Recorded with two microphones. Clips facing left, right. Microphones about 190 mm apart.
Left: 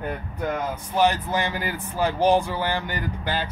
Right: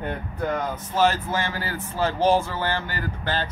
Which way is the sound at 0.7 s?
15° left (ahead or behind).